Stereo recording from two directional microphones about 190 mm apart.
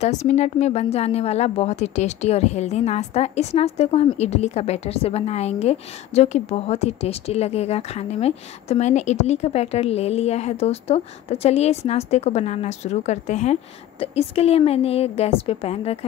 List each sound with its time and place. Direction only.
0.0 s speech: 35° left (ahead or behind)